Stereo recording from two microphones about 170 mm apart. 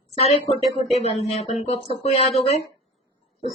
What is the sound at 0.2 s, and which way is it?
Speech, 35° left (ahead or behind).